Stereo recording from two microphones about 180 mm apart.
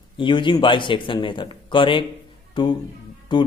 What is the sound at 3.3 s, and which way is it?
Speech, 25° left (ahead or behind).